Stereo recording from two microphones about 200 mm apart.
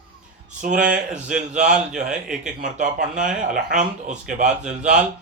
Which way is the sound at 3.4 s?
40° right (ahead or behind).